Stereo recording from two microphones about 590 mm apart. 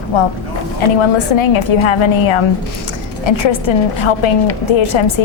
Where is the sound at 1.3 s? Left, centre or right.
Left.